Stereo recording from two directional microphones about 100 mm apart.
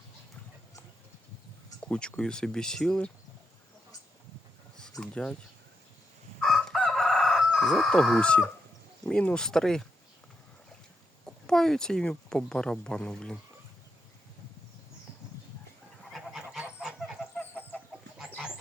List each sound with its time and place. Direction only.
1.8 s speech: 10° left (ahead or behind)
4.8 s speech: 5° left (ahead or behind)
6.4 s crowing: 5° left (ahead or behind)
9.0 s speech: 10° left (ahead or behind)
11.4 s speech: 5° left (ahead or behind)
16.0 s goose: centre (ahead or behind)
17.5 s chicken: 20° left (ahead or behind)